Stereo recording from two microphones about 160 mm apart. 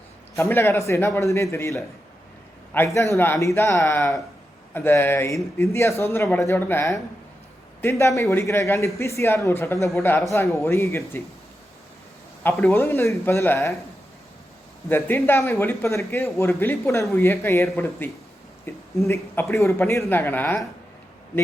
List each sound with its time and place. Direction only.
0.3 s a man's voice: 15° left (ahead or behind)
12.4 s a man's voice: 15° left (ahead or behind)
14.8 s a man's voice: 15° left (ahead or behind)